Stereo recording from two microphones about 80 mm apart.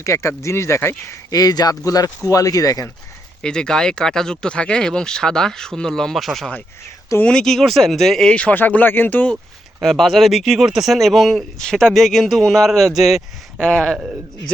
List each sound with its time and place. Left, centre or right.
0.0 s speech: left
1.3 s a man's voice: left
3.4 s speech: centre
8.3 s speech: centre
9.8 s speech: centre
13.6 s speech: centre